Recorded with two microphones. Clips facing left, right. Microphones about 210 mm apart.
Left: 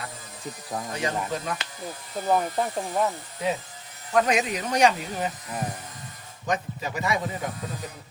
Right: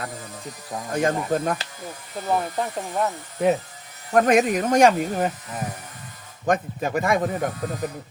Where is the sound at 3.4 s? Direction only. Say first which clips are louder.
Right 8 dB; 55° right (ahead or behind).